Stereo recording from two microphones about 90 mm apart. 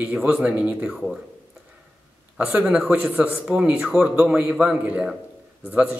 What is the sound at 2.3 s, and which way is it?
Speech, 15° right (ahead or behind).